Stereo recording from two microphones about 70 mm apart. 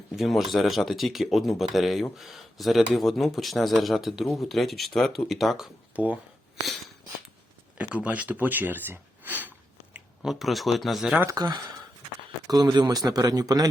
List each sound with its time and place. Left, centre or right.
0.2 s speech: centre
6.0 s speech: right
7.8 s speech: right
10.2 s speech: centre
11.3 s speech: right
12.5 s speech: right